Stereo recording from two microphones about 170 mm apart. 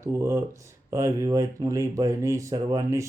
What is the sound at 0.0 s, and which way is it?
Speech, 15° right (ahead or behind).